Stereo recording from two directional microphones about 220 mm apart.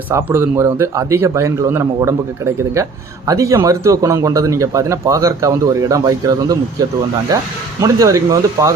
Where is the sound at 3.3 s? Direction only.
15° right (ahead or behind).